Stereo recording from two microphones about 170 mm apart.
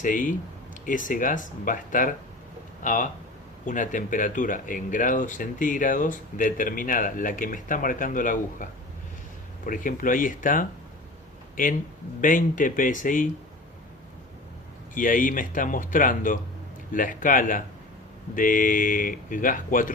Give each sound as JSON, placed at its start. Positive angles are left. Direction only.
{"t": 0.0, "sound": "speech", "side_deg": 50}
{"t": 9.6, "sound": "speech", "side_deg": 55}
{"t": 12.2, "sound": "speech", "side_deg": 50}
{"t": 14.9, "sound": "speech", "side_deg": 55}